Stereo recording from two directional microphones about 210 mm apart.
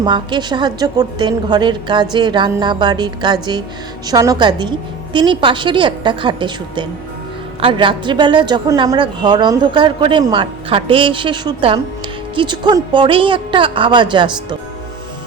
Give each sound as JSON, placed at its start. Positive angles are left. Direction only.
{"t": 0.0, "sound": "a woman's voice", "side_deg": -20}